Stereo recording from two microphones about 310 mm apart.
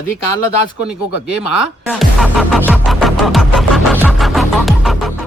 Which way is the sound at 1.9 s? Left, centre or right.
Centre.